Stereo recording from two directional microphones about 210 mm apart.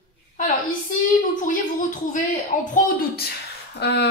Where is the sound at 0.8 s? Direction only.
40° left (ahead or behind).